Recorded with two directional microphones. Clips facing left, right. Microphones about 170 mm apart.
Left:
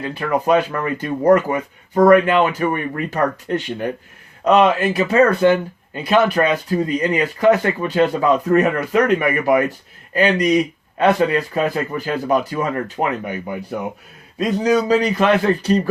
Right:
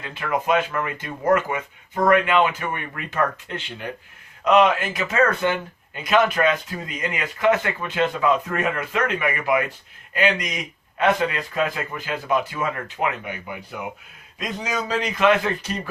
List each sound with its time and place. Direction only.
0.0 s speech: 35° left (ahead or behind)